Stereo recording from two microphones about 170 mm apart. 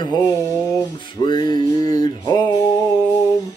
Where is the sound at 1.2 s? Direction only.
25° left (ahead or behind).